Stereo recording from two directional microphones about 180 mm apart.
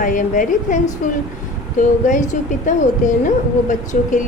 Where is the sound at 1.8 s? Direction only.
45° left (ahead or behind).